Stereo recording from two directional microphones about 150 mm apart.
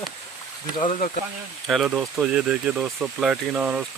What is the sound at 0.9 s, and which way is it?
Speech, 55° left (ahead or behind).